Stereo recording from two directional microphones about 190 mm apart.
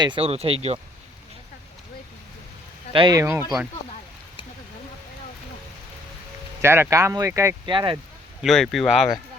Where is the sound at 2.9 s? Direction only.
25° right (ahead or behind).